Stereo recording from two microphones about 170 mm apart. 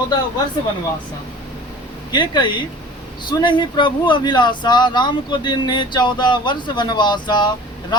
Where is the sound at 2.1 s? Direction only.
25° left (ahead or behind).